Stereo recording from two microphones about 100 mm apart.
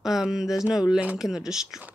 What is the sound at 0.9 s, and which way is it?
Speech, 10° right (ahead or behind).